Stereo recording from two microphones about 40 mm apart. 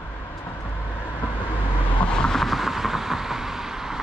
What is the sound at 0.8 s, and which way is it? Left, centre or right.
Vehicle, left.